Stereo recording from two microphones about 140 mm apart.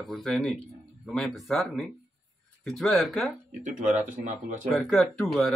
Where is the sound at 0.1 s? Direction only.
Centre (ahead or behind).